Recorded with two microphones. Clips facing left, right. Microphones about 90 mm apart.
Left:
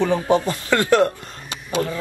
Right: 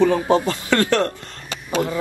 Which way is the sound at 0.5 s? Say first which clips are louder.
Left 1 dB; 15° left (ahead or behind).